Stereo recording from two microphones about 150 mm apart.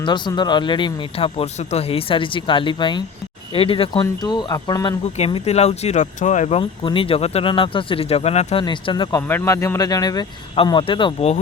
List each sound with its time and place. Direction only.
0.0 s speech: 30° left (ahead or behind)
4.0 s speech: 25° left (ahead or behind)
5.1 s speech: 45° left (ahead or behind)
6.6 s speech: 35° left (ahead or behind)
8.6 s speech: 30° left (ahead or behind)
9.2 s speech: 15° left (ahead or behind); by 11.3 s 40° left (ahead or behind)